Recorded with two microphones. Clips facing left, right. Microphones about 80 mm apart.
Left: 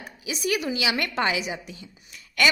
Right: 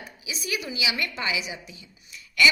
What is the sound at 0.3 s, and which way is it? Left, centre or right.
A woman's voice, left.